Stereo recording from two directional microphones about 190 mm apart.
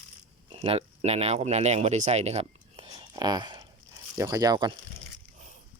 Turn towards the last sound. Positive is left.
turn(degrees=-20)  # may be behind; listen again after turning